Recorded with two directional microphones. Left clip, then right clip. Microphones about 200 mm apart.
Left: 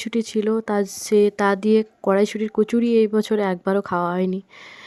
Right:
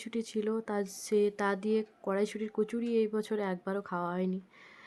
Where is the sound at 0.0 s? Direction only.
45° left (ahead or behind).